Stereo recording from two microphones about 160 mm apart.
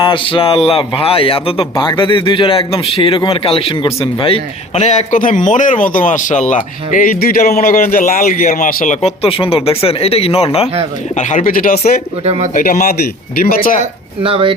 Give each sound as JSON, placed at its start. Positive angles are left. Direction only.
{"t": 0.0, "sound": "a man's voice", "side_deg": 35}
{"t": 11.2, "sound": "speech", "side_deg": 50}
{"t": 12.2, "sound": "speech", "side_deg": -40}
{"t": 12.5, "sound": "speech", "side_deg": 55}
{"t": 14.2, "sound": "speech", "side_deg": -35}